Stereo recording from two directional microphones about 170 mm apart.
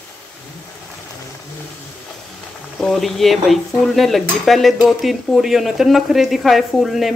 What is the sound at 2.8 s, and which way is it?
Speech, centre (ahead or behind).